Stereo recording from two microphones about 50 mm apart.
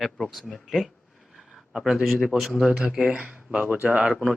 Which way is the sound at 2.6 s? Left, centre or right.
Centre.